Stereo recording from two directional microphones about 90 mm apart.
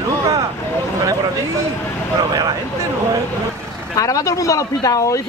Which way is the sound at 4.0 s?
40° left (ahead or behind).